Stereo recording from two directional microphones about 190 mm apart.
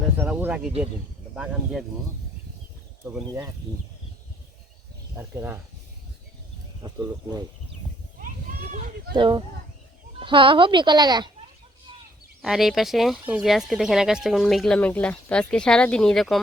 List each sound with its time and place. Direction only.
0.2 s a sound: 10° right (ahead or behind)
3.0 s speech: 10° right (ahead or behind)
5.1 s speech: 10° right (ahead or behind)
6.8 s speech: 20° right (ahead or behind)
8.7 s a sound: 45° right (ahead or behind)
9.1 s speech: 25° right (ahead or behind)
12.4 s speech: centre (ahead or behind)